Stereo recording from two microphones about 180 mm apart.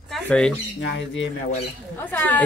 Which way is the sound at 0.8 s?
90° left.